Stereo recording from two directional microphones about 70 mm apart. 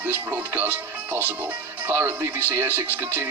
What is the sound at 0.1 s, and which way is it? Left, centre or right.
Music, right.